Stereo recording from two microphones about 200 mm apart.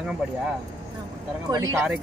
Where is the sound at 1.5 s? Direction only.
15° right (ahead or behind).